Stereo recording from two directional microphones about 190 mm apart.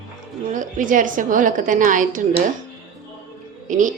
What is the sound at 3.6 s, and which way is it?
Speech, 45° right (ahead or behind).